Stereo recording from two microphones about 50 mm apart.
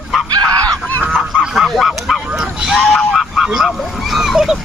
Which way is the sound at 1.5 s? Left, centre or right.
Centre.